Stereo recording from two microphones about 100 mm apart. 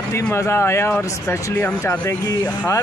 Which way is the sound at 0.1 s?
25° left (ahead or behind).